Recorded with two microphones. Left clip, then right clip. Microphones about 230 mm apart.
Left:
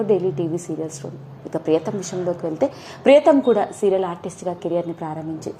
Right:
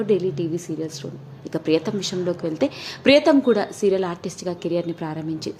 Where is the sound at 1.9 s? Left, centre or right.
Right.